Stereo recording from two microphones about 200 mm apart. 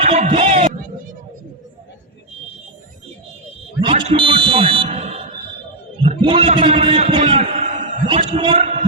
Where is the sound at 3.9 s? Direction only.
30° right (ahead or behind).